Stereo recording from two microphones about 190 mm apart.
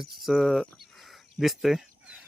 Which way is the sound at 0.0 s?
Centre (ahead or behind).